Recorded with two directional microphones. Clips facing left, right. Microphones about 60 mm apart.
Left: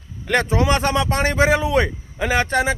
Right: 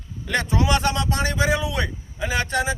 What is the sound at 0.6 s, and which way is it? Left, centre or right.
Speech, left.